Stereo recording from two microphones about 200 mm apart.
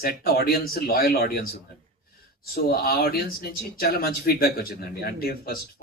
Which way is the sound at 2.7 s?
50° left (ahead or behind).